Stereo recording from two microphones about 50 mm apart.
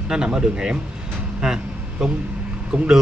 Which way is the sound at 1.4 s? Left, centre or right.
Centre.